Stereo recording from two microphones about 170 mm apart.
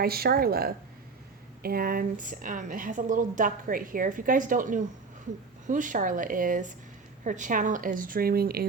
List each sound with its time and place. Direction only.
0.0 s a woman's voice: 65° right (ahead or behind)